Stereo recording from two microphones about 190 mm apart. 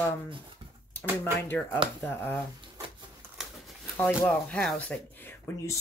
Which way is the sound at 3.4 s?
Centre (ahead or behind).